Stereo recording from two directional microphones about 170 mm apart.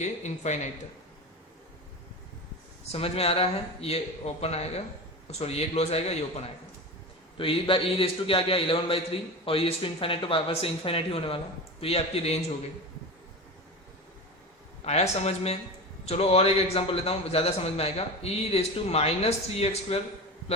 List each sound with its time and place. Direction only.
0.0 s speech: 45° left (ahead or behind)
2.9 s a man's voice: 35° left (ahead or behind)
14.8 s a man's voice: 40° left (ahead or behind)